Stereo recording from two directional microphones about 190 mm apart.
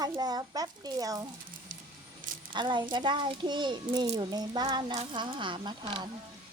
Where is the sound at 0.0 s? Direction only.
20° right (ahead or behind).